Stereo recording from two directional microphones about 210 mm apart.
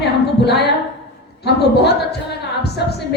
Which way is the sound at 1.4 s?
50° left (ahead or behind).